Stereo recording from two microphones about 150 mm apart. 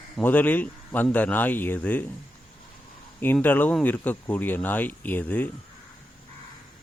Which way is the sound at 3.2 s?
15° left (ahead or behind).